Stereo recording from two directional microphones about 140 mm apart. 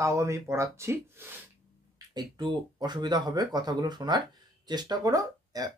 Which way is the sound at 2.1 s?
30° right (ahead or behind).